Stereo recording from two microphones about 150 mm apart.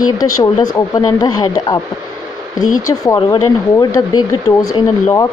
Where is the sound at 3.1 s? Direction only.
25° left (ahead or behind).